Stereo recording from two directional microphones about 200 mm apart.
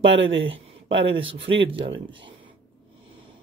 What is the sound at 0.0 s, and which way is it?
Speech, 65° right (ahead or behind).